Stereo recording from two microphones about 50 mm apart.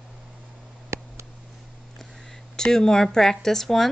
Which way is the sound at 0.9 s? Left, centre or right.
Right.